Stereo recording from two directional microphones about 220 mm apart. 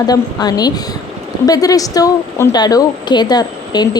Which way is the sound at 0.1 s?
15° left (ahead or behind).